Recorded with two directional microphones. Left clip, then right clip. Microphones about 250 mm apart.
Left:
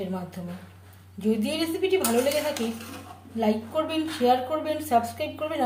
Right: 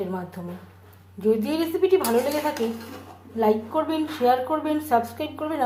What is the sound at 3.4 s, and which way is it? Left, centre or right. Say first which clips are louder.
A woman's voice: right 4 dB; centre.